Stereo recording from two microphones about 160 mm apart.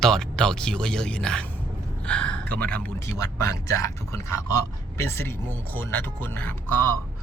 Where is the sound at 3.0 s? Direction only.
20° left (ahead or behind).